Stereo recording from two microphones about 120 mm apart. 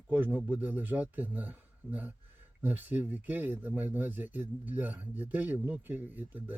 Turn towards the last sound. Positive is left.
turn(degrees=-15)  # may be behind; listen again after turning